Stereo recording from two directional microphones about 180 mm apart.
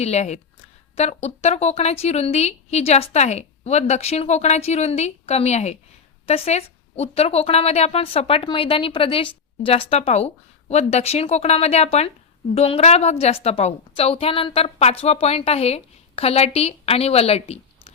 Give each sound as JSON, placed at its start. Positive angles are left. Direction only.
{"t": 0.0, "sound": "speech", "side_deg": 40}